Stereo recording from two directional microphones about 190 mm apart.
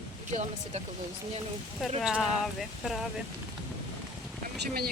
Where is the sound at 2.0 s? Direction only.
Centre (ahead or behind).